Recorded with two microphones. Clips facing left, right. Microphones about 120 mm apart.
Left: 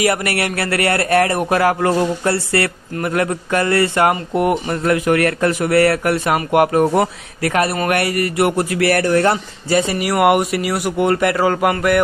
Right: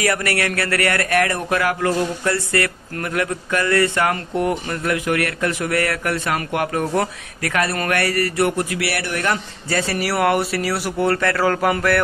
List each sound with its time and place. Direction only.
0.0 s speech: 25° left (ahead or behind)
5.6 s speech: 30° left (ahead or behind)
8.7 s speech: 45° left (ahead or behind); by 11.7 s 15° left (ahead or behind)